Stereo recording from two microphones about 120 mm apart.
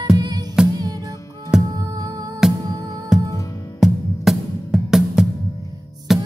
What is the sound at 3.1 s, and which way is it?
Music, 5° right (ahead or behind).